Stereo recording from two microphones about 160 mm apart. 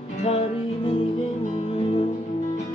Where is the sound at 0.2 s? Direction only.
40° left (ahead or behind).